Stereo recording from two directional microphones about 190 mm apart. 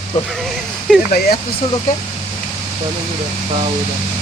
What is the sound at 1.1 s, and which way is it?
Speech, 55° left (ahead or behind).